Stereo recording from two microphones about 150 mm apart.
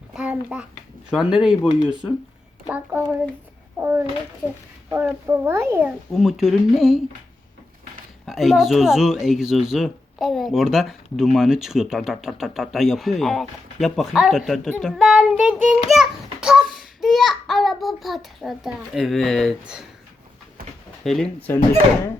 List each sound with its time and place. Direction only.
0.1 s a sound: 5° right (ahead or behind)
1.1 s speech: 5° right (ahead or behind)
1.6 s speech: 30° left (ahead or behind)
2.6 s a child's voice: 10° right (ahead or behind)
5.2 s speech: 15° right (ahead or behind)
6.1 s speech: centre (ahead or behind)
8.3 s speech: centre (ahead or behind)
15.9 s a sound: 5° right (ahead or behind)
17.0 s speech: centre (ahead or behind)
21.0 s speech: 5° left (ahead or behind)
21.5 s speech: 15° left (ahead or behind)